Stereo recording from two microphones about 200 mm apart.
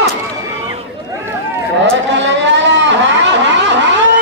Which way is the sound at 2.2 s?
65° right (ahead or behind).